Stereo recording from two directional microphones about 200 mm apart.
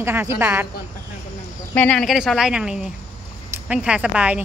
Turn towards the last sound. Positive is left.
turn(degrees=-5)  # may be behind; listen again after turning